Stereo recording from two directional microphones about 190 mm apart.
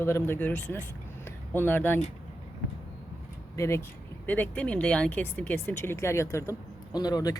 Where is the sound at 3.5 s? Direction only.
15° left (ahead or behind).